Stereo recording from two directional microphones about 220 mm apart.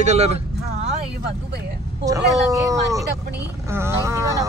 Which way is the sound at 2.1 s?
15° right (ahead or behind).